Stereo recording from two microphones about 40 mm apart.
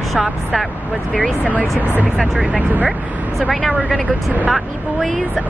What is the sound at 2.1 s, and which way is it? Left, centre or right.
Speech, centre.